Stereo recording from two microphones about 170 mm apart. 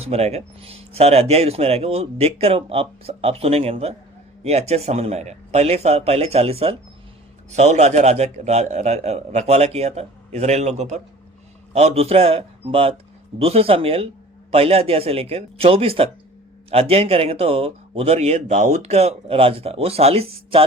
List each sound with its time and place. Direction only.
0.0 s speech: 40° right (ahead or behind)